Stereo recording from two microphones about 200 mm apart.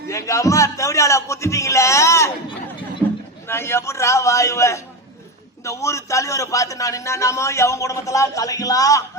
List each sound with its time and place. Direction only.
0.1 s a man's voice: 15° left (ahead or behind)
3.4 s a man's voice: 10° left (ahead or behind)